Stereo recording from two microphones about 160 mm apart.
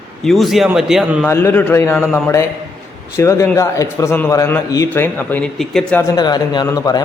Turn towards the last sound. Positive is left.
turn(degrees=20)  # may be behind; listen again after turning